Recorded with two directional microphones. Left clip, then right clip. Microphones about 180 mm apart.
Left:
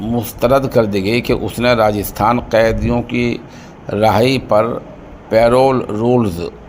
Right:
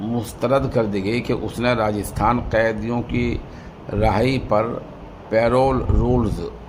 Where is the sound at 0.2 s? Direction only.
15° left (ahead or behind).